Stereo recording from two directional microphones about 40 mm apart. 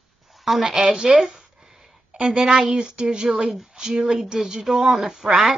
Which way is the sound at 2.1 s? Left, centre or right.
Centre.